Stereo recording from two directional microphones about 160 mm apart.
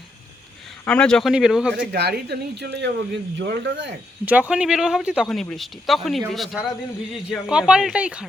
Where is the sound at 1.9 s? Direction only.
90° right.